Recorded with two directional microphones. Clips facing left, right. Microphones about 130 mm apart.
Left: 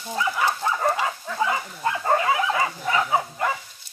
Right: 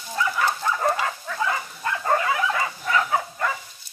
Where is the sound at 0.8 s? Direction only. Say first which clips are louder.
Even; 10° left (ahead or behind).